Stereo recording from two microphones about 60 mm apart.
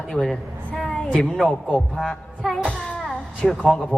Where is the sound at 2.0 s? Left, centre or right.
Centre.